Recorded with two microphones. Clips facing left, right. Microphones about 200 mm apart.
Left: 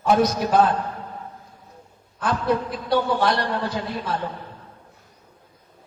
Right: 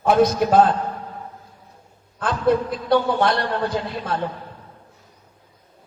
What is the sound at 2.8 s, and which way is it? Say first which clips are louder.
A man's voice: right 2 dB; 55° right (ahead or behind).